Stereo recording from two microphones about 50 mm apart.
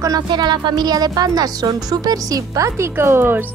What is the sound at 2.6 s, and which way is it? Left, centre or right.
Speech, right.